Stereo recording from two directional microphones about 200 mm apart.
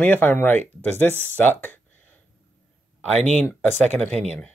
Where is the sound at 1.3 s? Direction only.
10° left (ahead or behind).